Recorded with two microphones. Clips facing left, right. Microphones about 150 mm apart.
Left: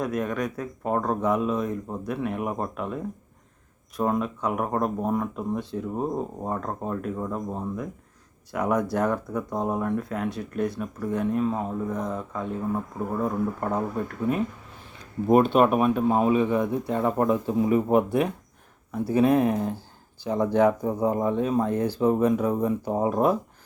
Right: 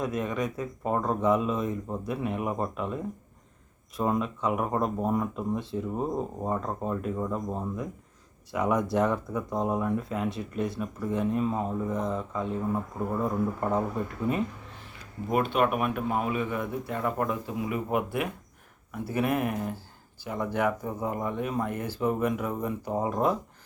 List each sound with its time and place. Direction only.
0.0 s speech: centre (ahead or behind)
15.3 s speech: 40° left (ahead or behind)
18.9 s speech: 20° left (ahead or behind)